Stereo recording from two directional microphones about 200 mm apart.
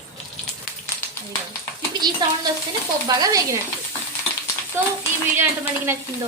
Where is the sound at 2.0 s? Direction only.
20° right (ahead or behind).